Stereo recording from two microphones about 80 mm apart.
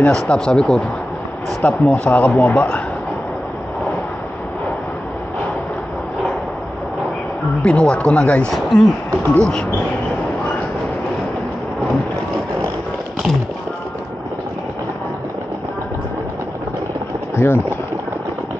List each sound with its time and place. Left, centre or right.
0.0 s speech: centre
7.6 s speech: centre
17.4 s speech: left